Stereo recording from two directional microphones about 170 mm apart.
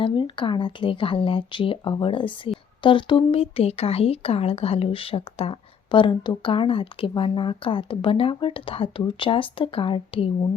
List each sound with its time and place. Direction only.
0.0 s speech: 30° left (ahead or behind)